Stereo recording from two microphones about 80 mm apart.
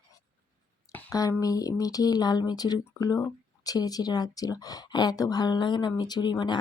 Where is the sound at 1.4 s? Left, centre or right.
Left.